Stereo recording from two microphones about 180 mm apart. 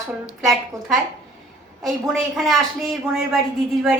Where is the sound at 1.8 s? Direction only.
Centre (ahead or behind).